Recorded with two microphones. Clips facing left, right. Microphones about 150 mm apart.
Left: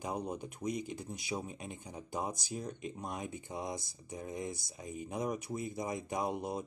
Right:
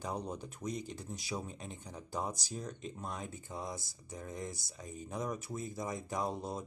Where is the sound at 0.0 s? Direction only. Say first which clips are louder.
Left 2 dB; 10° left (ahead or behind).